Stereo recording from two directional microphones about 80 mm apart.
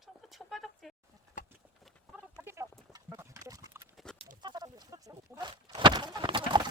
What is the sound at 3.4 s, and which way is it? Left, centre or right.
Clip-clop, right.